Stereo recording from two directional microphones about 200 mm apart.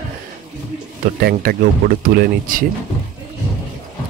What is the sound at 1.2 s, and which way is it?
Speech, 50° right (ahead or behind).